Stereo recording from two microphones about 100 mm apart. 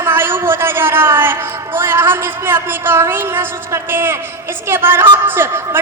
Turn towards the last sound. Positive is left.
turn(degrees=-25)  # may be behind; listen again after turning